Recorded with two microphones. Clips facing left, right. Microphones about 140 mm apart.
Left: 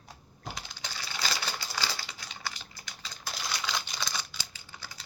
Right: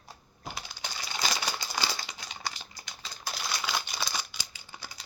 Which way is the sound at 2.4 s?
15° right (ahead or behind).